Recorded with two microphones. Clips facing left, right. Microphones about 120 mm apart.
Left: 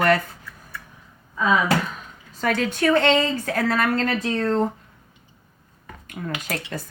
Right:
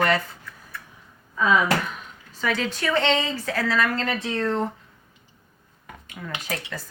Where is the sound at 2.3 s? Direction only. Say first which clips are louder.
Left 3 dB; 45° left (ahead or behind).